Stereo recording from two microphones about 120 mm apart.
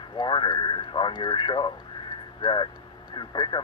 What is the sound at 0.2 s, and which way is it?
Speech, 40° left (ahead or behind).